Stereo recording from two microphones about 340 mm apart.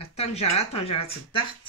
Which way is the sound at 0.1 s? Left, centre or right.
Centre.